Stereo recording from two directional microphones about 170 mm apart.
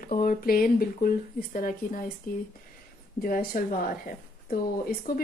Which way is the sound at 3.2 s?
55° left (ahead or behind).